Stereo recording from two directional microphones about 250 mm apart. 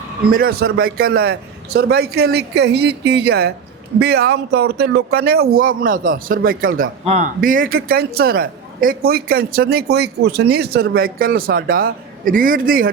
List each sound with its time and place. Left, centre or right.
0.3 s speech: right